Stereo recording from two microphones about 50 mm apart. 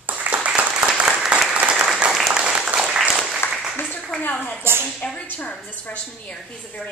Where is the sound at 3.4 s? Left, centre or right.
Left.